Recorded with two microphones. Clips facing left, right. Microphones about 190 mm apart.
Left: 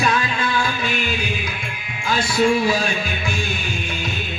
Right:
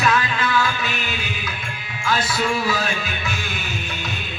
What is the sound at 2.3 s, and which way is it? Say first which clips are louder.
Music: left 5 dB; 25° left (ahead or behind).